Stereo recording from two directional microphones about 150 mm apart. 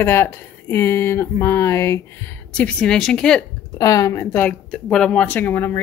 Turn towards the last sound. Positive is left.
turn(degrees=15)  # may be behind; listen again after turning